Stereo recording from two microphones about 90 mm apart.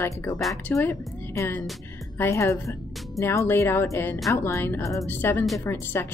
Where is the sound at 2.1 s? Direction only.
30° left (ahead or behind).